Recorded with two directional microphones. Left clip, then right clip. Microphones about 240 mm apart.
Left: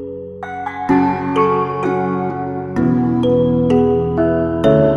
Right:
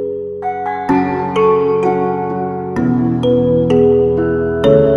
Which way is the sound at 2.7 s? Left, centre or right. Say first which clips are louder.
Left 1 dB; centre.